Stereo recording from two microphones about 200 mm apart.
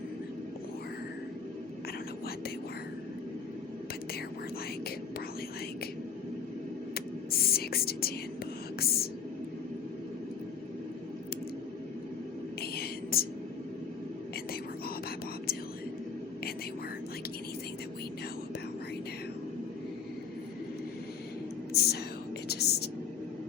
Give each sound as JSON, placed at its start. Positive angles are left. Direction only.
{"t": 6.9, "sound": "whispering", "side_deg": 50}
{"t": 12.7, "sound": "whispering", "side_deg": 50}
{"t": 21.7, "sound": "whispering", "side_deg": 55}